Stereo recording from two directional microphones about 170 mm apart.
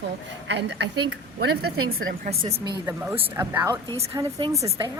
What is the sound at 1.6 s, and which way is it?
Speech, 55° right (ahead or behind).